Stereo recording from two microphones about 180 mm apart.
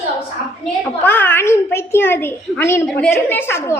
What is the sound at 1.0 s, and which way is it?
A child's voice, 10° left (ahead or behind).